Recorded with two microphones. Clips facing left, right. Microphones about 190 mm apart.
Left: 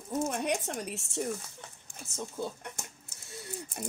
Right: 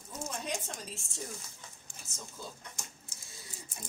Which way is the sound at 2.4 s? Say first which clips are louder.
Left 9 dB; 60° left (ahead or behind).